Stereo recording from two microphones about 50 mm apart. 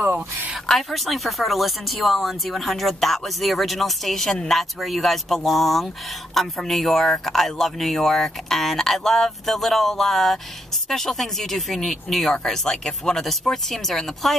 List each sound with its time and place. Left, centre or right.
0.0 s speech: right
0.7 s speech: centre